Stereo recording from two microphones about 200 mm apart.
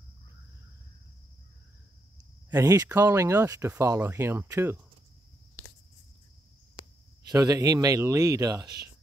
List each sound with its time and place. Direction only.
2.5 s speech: 15° right (ahead or behind)
7.2 s speech: 15° right (ahead or behind)